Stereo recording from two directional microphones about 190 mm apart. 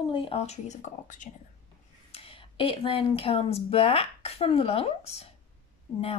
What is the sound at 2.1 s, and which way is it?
Speech, 30° left (ahead or behind).